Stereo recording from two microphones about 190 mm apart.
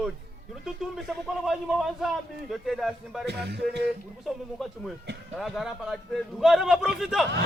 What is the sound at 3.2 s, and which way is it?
Music, 60° right (ahead or behind).